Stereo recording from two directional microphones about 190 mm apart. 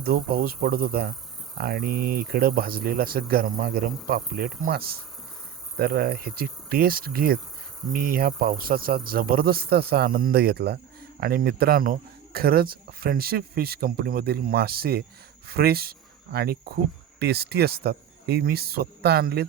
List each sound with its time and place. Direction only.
0.0 s speech: 50° right (ahead or behind)